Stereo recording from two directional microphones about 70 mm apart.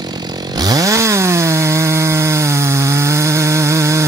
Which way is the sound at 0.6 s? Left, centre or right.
Right.